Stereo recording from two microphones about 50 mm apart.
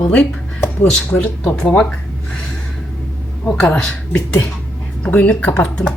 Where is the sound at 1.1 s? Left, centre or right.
Left.